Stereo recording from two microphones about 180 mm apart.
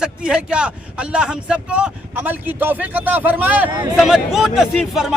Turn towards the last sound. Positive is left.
turn(degrees=0)  # may be behind; listen again after turning